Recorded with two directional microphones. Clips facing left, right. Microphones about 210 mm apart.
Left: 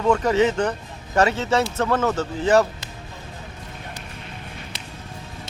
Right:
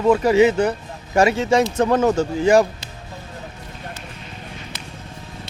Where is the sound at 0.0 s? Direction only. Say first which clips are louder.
Right 4 dB; 10° right (ahead or behind).